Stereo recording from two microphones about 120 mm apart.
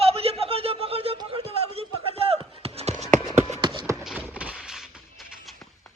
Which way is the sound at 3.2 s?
30° left (ahead or behind).